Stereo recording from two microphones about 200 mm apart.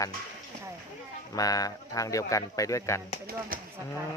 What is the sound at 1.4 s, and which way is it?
Speech, 20° left (ahead or behind).